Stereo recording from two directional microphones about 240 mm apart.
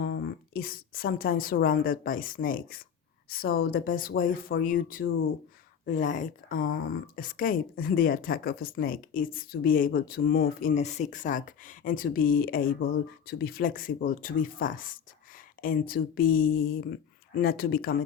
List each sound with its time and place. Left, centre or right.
0.0 s a woman's voice: left